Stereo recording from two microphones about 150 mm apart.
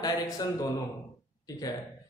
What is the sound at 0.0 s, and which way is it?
Speech, 25° left (ahead or behind).